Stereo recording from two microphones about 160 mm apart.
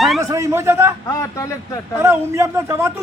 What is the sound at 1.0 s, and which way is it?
Speech, 20° left (ahead or behind).